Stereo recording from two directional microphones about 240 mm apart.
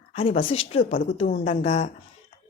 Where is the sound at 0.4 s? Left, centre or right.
Left.